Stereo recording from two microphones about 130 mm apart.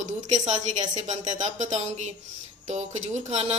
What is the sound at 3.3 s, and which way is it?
Speech, 60° right (ahead or behind).